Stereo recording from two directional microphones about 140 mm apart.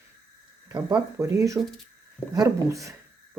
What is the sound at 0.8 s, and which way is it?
Speech, 25° right (ahead or behind).